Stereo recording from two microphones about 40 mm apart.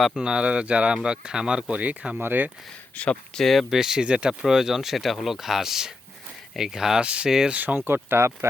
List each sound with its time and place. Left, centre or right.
0.2 s speech: right
1.7 s speech: right
2.2 s speech: right
2.9 s speech: left
3.5 s speech: centre
3.8 s speech: centre
4.0 s speech: right
4.4 s speech: centre
7.0 s speech: right
7.8 s speech: right